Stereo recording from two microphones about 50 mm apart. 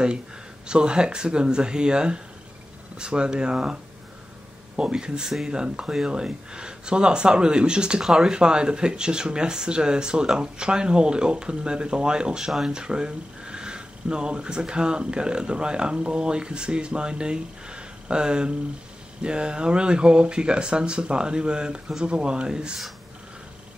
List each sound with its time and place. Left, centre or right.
0.7 s speech: centre
4.7 s speech: centre